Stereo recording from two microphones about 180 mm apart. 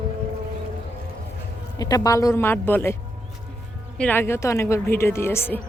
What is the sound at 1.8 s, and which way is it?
A woman's voice, 20° left (ahead or behind).